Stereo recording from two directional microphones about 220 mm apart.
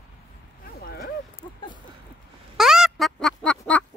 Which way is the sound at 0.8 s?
45° left (ahead or behind).